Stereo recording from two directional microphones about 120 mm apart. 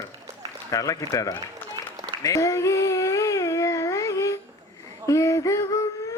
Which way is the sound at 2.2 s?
25° left (ahead or behind).